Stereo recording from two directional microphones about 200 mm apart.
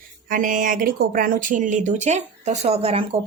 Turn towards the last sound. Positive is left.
turn(degrees=-30)  # may be behind; listen again after turning